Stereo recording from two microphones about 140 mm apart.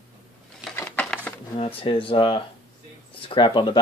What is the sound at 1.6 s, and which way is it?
Speech, 40° left (ahead or behind).